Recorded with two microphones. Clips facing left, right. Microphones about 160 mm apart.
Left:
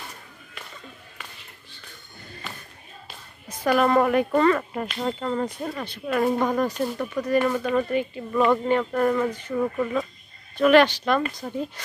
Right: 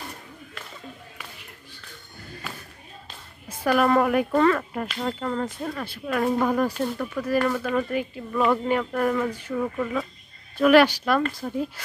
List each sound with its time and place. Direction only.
3.4 s a woman's voice: 5° right (ahead or behind)